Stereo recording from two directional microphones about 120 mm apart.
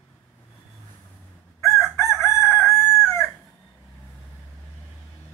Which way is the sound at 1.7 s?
20° left (ahead or behind).